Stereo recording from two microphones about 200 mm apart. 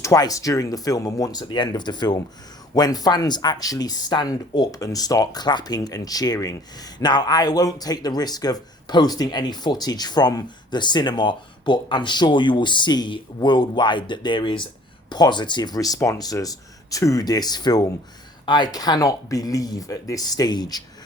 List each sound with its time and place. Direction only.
0.0 s speech: 15° left (ahead or behind)